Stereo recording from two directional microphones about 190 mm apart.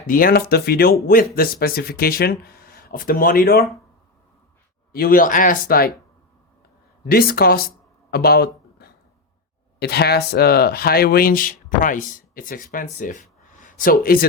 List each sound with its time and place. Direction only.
0.1 s speech: 50° left (ahead or behind)
4.9 s speech: 50° left (ahead or behind)
7.0 s speech: 55° left (ahead or behind)
8.1 s a sound: 55° left (ahead or behind)
9.8 s speech: 60° left (ahead or behind)